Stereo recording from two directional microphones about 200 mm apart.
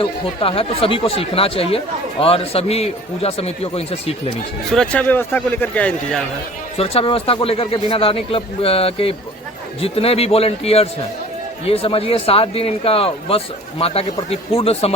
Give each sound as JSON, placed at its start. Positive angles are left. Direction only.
{"t": 0.0, "sound": "a man's voice", "side_deg": 25}
{"t": 4.7, "sound": "a man's voice", "side_deg": 5}
{"t": 6.7, "sound": "speech", "side_deg": 30}